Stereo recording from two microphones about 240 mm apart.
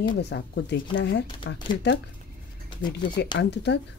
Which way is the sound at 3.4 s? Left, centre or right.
Left.